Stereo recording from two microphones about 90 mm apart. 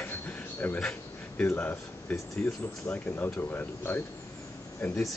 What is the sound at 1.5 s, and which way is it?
Speech, 20° left (ahead or behind).